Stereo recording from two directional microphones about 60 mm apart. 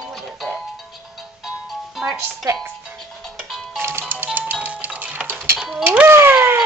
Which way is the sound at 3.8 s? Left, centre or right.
Right.